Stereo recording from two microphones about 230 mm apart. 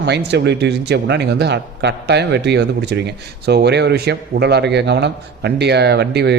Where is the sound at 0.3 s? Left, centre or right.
Right.